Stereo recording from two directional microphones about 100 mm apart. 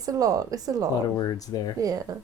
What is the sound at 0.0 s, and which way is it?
Speech, 35° right (ahead or behind).